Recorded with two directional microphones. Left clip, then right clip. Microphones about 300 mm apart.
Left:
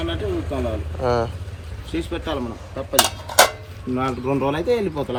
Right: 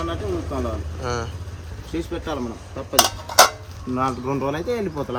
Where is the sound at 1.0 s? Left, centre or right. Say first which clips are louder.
Left 7 dB; centre.